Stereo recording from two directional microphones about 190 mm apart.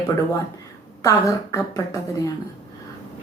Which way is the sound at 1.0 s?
20° left (ahead or behind).